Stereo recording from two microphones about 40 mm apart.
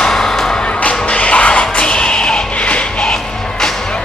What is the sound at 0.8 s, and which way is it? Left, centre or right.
Music, left.